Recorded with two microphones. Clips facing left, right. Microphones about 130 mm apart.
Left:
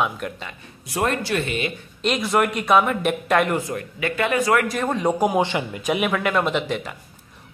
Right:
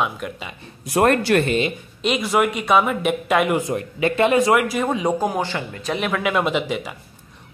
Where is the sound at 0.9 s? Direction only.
55° right (ahead or behind).